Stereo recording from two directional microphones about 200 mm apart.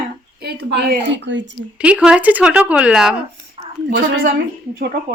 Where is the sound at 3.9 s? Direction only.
60° right (ahead or behind).